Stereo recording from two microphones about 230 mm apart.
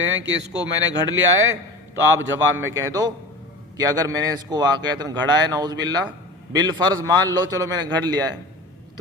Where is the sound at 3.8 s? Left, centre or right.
Centre.